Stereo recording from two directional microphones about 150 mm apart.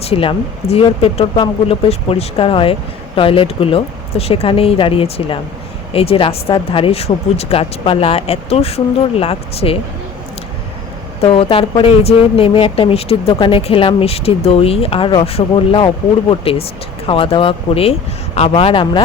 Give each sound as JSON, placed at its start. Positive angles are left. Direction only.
{"t": 0.0, "sound": "speech", "side_deg": 40}
{"t": 11.2, "sound": "speech", "side_deg": 40}